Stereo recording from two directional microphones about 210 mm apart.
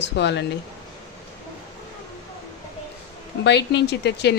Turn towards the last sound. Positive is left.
turn(degrees=55)  # may be behind; listen again after turning